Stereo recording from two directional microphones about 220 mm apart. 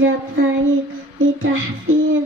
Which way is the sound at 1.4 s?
65° right (ahead or behind).